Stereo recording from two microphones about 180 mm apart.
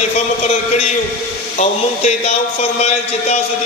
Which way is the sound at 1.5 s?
40° left (ahead or behind).